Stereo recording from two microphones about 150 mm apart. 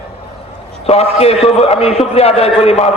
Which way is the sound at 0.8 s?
45° left (ahead or behind).